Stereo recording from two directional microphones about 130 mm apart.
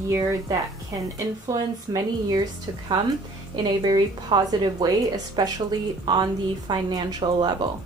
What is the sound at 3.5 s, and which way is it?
A woman's voice, 35° right (ahead or behind).